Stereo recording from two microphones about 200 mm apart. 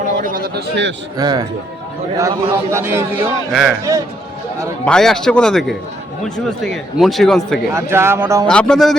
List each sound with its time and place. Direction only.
0.3 s a man's voice: 50° right (ahead or behind)
1.1 s a man's voice: 20° right (ahead or behind); by 3.8 s 5° right (ahead or behind)
4.9 s a man's voice: 5° left (ahead or behind)
7.7 s a man's voice: 15° right (ahead or behind)
8.4 s a man's voice: 5° left (ahead or behind)